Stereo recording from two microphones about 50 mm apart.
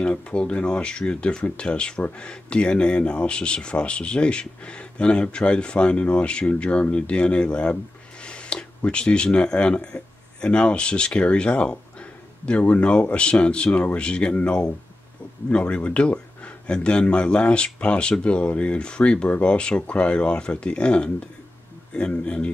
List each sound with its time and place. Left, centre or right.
0.0 s speech: left
22.1 s speech: left